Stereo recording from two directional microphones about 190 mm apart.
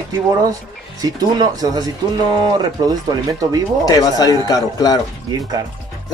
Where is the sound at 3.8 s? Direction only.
20° left (ahead or behind).